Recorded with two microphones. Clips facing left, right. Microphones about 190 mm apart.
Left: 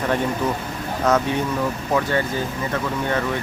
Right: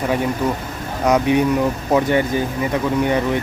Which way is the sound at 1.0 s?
15° right (ahead or behind).